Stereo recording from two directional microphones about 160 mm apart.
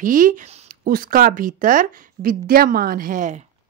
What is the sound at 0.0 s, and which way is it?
Speech, 55° right (ahead or behind).